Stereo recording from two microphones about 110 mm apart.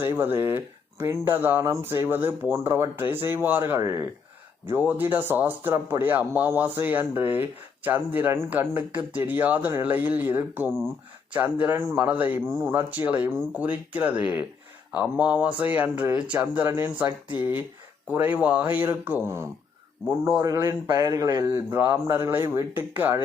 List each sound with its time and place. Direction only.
0.0 s speech: 20° right (ahead or behind)